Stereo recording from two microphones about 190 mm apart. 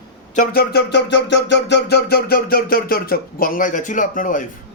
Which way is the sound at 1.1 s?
65° left (ahead or behind).